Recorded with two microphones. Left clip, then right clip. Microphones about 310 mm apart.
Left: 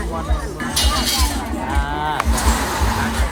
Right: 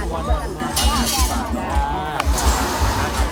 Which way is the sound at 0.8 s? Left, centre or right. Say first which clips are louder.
Left 1 dB; centre.